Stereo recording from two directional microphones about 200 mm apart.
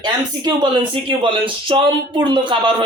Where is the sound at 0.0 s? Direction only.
20° right (ahead or behind).